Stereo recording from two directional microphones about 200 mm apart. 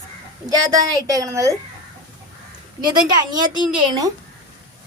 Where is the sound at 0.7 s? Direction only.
15° right (ahead or behind).